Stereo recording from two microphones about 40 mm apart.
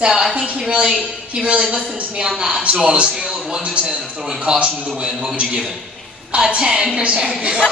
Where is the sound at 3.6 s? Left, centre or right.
Right.